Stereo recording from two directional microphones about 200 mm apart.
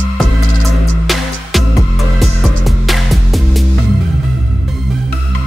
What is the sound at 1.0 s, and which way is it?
Music, centre (ahead or behind).